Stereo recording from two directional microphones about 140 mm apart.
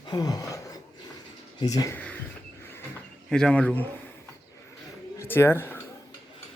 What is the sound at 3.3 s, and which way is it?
Speech, 5° left (ahead or behind).